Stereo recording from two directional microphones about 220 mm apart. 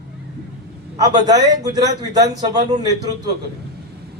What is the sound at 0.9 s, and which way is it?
A man's voice, 20° right (ahead or behind).